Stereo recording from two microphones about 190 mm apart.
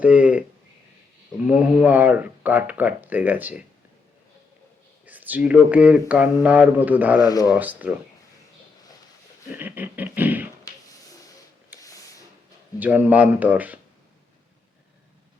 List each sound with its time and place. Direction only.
0.0 s speech: 5° right (ahead or behind)
1.5 s speech: 5° right (ahead or behind)
5.0 s speech: 10° right (ahead or behind)
7.2 s speech: 20° left (ahead or behind)
7.5 s speech: 10° right (ahead or behind)
9.5 s speech: 10° right (ahead or behind)
11.8 s a sound: 15° left (ahead or behind)
12.8 s speech: 10° right (ahead or behind)